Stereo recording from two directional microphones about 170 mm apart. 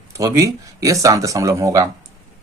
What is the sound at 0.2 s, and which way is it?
Speech, 20° right (ahead or behind).